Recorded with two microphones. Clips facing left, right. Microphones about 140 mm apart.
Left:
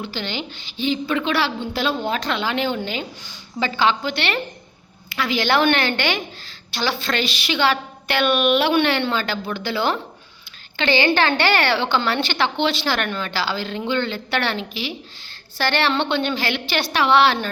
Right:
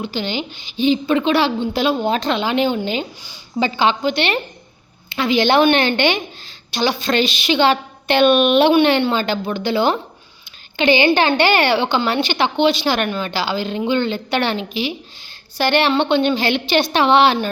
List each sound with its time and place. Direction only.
0.0 s a woman's voice: 15° right (ahead or behind)